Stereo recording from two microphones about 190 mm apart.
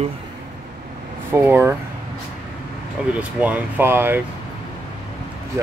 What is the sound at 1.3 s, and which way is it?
Speech, 10° right (ahead or behind).